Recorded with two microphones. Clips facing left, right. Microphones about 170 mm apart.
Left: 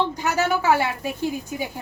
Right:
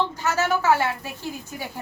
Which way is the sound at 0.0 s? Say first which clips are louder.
Left 1 dB; 15° left (ahead or behind).